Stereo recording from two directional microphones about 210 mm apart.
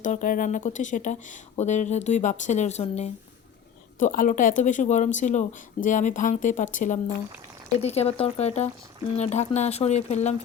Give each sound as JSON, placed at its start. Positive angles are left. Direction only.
{"t": 0.0, "sound": "speech", "side_deg": 40}